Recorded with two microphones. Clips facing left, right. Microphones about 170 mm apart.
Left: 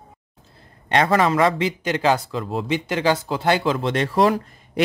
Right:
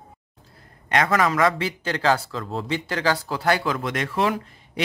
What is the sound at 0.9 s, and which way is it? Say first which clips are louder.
A man's voice: left 3 dB; 30° left (ahead or behind).